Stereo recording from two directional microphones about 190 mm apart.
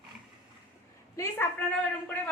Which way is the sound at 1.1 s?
15° left (ahead or behind).